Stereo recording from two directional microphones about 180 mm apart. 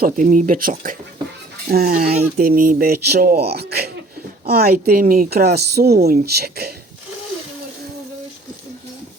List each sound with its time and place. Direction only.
0.0 s speech: 45° right (ahead or behind); by 6.7 s 60° right (ahead or behind)